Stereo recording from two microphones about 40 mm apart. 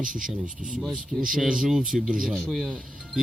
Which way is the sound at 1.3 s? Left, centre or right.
Right.